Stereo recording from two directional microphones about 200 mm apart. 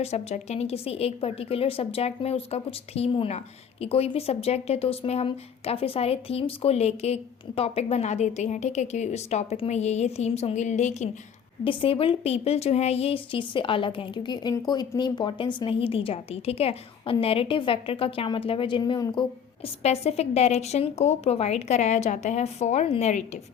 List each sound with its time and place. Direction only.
0.0 s speech: 30° left (ahead or behind)
19.6 s speech: 30° left (ahead or behind)